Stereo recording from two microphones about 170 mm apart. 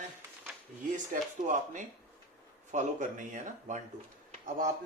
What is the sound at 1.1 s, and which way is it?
Speech, 50° right (ahead or behind).